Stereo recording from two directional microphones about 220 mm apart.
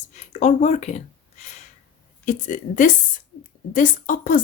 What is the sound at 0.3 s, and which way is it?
Speech, 30° left (ahead or behind).